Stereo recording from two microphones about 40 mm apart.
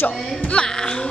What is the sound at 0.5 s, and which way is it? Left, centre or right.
Speech, centre.